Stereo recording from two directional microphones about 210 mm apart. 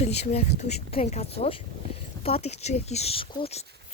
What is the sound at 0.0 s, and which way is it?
Speech, 30° left (ahead or behind).